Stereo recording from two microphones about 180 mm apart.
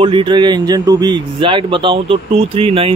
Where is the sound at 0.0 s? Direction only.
30° right (ahead or behind).